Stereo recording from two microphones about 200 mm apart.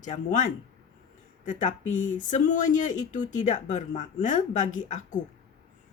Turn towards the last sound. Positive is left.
turn(degrees=40)  # may be behind; listen again after turning